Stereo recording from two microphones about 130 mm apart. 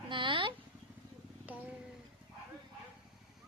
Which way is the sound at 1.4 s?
10° right (ahead or behind).